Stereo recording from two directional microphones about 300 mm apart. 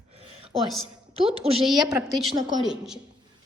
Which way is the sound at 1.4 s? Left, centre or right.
Centre.